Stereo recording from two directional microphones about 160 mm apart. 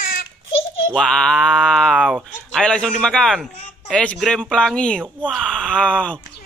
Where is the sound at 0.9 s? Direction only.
5° left (ahead or behind).